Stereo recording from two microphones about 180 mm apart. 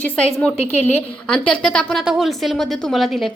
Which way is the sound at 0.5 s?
35° left (ahead or behind).